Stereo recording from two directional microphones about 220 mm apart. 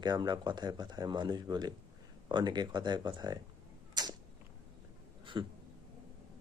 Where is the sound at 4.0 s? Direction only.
20° right (ahead or behind).